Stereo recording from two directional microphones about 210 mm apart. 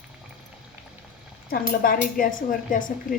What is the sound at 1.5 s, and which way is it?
A woman's voice, 45° left (ahead or behind).